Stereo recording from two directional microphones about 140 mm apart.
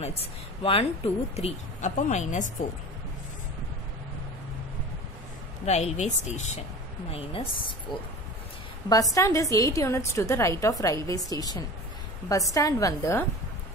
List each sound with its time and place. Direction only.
0.0 s speech: 45° left (ahead or behind)
5.7 s speech: 55° left (ahead or behind)
7.1 s a woman's voice: 40° left (ahead or behind)
8.8 s a woman's voice: 25° left (ahead or behind)